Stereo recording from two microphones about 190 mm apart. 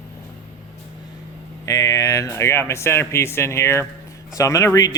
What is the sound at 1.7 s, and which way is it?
Speech, 15° left (ahead or behind).